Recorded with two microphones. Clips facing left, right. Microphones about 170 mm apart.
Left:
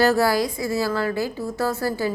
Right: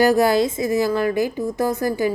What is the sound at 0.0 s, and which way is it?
A woman's voice, 15° right (ahead or behind).